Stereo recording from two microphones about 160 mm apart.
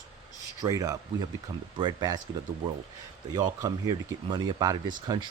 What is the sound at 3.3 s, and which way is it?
Speech, 25° right (ahead or behind).